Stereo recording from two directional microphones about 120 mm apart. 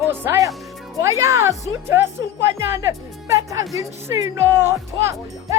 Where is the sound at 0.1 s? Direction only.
25° right (ahead or behind).